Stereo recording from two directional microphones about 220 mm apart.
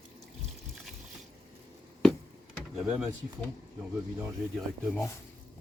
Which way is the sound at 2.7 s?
5° right (ahead or behind).